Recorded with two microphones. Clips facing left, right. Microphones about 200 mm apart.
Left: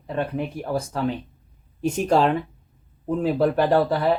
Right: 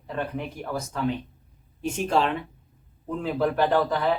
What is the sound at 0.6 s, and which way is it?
Speech, 30° left (ahead or behind).